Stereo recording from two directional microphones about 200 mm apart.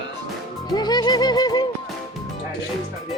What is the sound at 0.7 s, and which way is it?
Music, 20° left (ahead or behind).